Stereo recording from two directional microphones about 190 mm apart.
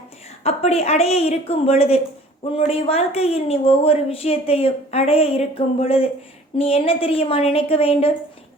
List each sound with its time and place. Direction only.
0.4 s a woman's voice: 35° left (ahead or behind)